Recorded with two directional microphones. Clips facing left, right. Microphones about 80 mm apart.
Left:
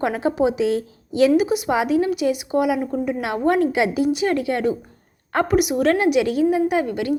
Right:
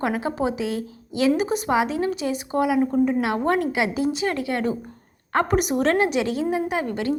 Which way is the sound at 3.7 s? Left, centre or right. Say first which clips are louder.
Left 4 dB; right.